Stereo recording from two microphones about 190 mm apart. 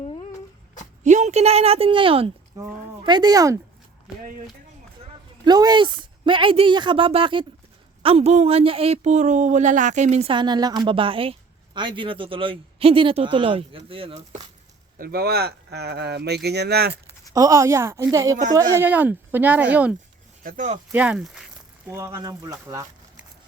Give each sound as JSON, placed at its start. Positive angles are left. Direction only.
{"t": 1.0, "sound": "a woman's voice", "side_deg": -40}
{"t": 5.5, "sound": "speech", "side_deg": -20}
{"t": 14.9, "sound": "speech", "side_deg": -50}
{"t": 17.3, "sound": "speech", "side_deg": -15}
{"t": 20.4, "sound": "speech", "side_deg": -45}
{"t": 20.9, "sound": "speech", "side_deg": -5}